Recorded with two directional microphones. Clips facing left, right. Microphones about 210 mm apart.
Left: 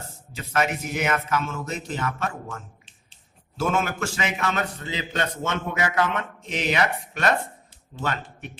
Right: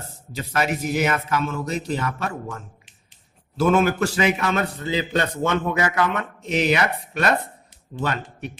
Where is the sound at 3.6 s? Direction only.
35° right (ahead or behind).